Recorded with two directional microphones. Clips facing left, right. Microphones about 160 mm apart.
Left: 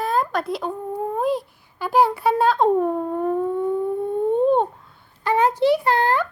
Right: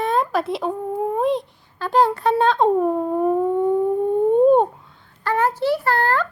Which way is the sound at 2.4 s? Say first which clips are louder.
Right 1 dB; centre (ahead or behind).